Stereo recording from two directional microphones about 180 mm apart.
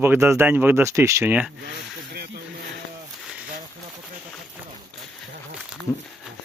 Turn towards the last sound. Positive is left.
turn(degrees=0)  # may be behind; listen again after turning